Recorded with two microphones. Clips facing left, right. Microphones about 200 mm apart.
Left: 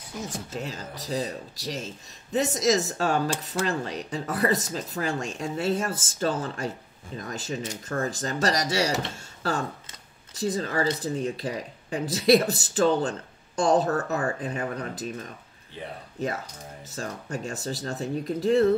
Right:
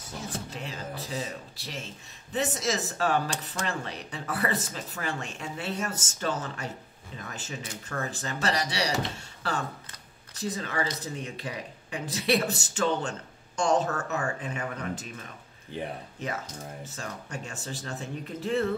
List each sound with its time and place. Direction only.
0.5 s speech: 40° left (ahead or behind)
16.8 s speech: 40° left (ahead or behind)